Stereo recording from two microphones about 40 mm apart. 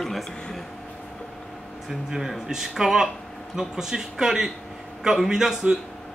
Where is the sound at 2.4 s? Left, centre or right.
Centre.